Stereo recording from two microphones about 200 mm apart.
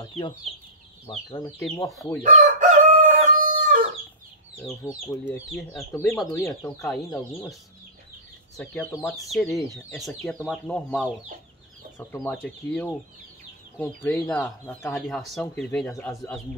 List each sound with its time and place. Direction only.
0.0 s speech: 25° left (ahead or behind)
2.2 s chicken: 40° right (ahead or behind)
4.8 s speech: 15° left (ahead or behind)
5.5 s speech: centre (ahead or behind)
6.1 s speech: 15° left (ahead or behind)
9.1 s speech: centre (ahead or behind)
16.1 s speech: 15° left (ahead or behind)